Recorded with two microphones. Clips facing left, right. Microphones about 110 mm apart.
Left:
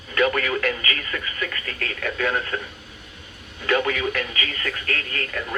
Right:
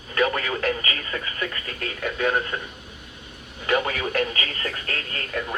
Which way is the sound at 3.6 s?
25° right (ahead or behind).